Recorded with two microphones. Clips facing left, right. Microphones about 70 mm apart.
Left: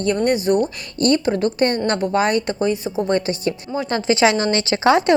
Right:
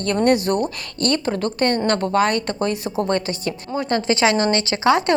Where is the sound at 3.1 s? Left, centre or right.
Left.